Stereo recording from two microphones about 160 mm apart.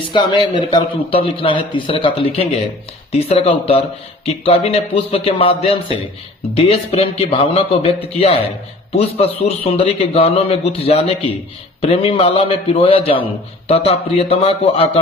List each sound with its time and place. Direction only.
0.1 s a man's voice: 30° left (ahead or behind)